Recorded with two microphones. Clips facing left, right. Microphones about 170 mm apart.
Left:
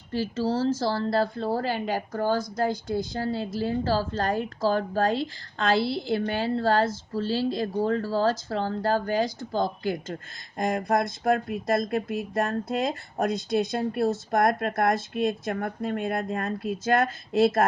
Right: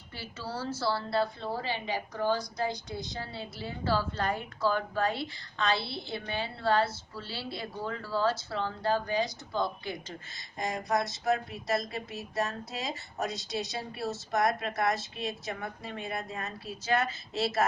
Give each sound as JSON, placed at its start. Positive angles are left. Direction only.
{"t": 0.4, "sound": "speech", "side_deg": 40}
{"t": 5.7, "sound": "a woman's voice", "side_deg": 90}
{"t": 6.4, "sound": "speech", "side_deg": 40}